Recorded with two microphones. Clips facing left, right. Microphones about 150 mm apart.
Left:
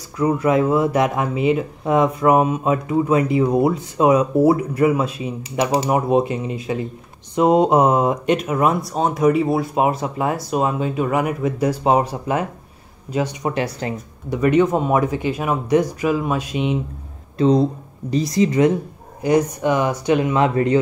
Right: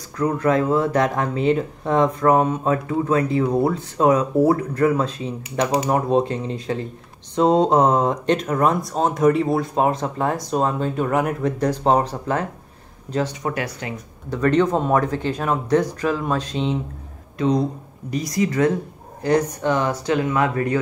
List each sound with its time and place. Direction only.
0.2 s speech: 10° left (ahead or behind); by 13.9 s 30° left (ahead or behind)
14.3 s speech: 10° left (ahead or behind)
17.4 s speech: 30° left (ahead or behind)